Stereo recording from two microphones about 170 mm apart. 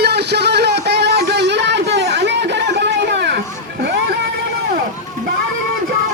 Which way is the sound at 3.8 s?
75° right (ahead or behind).